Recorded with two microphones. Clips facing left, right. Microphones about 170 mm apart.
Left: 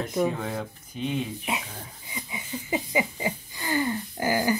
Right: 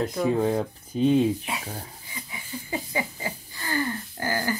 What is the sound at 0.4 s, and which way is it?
Speech, 35° right (ahead or behind).